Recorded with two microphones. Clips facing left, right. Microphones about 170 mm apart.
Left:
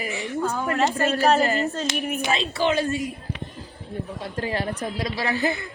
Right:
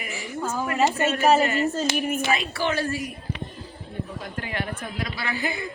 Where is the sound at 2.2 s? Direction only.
20° left (ahead or behind).